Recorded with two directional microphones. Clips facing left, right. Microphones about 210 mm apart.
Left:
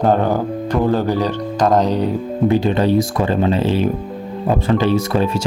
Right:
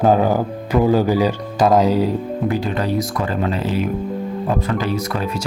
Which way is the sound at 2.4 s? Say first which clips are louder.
Left 7 dB; 25° left (ahead or behind).